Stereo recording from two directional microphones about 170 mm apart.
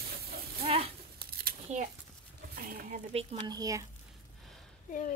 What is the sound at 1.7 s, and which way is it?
Speech, 45° right (ahead or behind).